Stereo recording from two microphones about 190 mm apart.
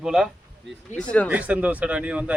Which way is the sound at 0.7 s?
70° right (ahead or behind).